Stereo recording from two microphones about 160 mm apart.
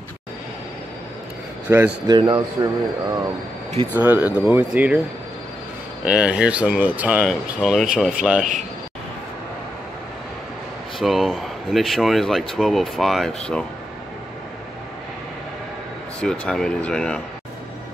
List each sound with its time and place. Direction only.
1.7 s speech: 15° right (ahead or behind)
2.0 s speech: 25° right (ahead or behind)
3.9 s speech: 10° right (ahead or behind)
6.0 s speech: 5° right (ahead or behind)
11.0 s speech: centre (ahead or behind)
16.2 s speech: 5° left (ahead or behind)